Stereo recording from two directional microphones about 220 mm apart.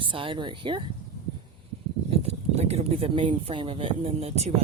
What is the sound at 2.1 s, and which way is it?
Speech, 30° right (ahead or behind).